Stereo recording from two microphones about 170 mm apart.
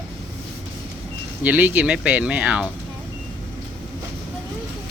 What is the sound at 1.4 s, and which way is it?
Speech, 10° right (ahead or behind).